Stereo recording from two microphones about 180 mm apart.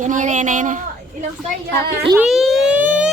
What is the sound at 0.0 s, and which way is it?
Speech, 45° right (ahead or behind).